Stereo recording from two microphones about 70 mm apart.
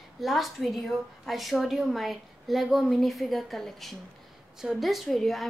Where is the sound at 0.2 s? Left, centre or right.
Centre.